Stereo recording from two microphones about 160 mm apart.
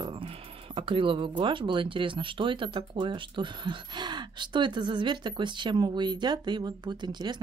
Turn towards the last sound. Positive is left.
turn(degrees=-30)  # may be behind; listen again after turning